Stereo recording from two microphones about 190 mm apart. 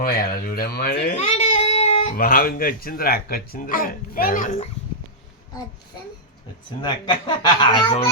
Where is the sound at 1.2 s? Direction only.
35° left (ahead or behind).